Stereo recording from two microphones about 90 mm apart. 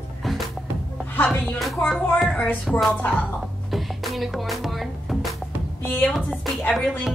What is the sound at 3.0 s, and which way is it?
Speech, 20° left (ahead or behind).